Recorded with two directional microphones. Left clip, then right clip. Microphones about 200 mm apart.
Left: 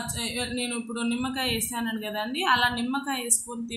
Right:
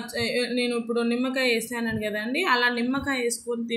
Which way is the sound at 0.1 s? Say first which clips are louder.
Right 9 dB; 5° right (ahead or behind).